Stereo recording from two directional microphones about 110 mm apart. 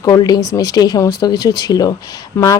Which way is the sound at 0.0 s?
35° left (ahead or behind).